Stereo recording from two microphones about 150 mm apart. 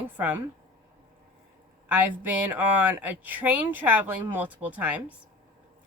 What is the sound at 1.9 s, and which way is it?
Speech, 10° right (ahead or behind).